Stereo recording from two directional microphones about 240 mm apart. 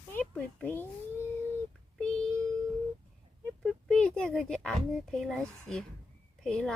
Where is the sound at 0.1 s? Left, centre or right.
Centre.